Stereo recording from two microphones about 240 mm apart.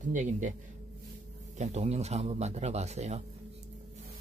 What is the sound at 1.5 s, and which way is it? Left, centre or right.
A man's voice, right.